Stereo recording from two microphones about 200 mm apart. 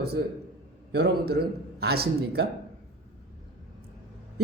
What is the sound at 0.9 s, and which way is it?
A woman's voice, 55° right (ahead or behind).